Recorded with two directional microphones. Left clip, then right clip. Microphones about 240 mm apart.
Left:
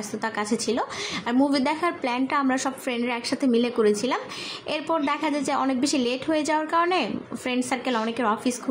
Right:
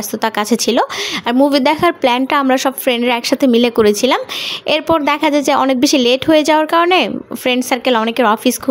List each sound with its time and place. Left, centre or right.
0.2 s a woman's voice: right